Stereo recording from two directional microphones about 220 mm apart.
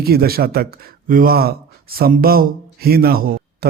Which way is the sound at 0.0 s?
45° right (ahead or behind).